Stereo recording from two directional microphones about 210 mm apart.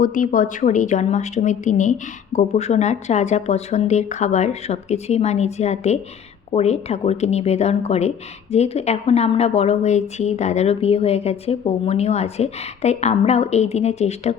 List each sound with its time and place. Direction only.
0.0 s speech: 40° left (ahead or behind)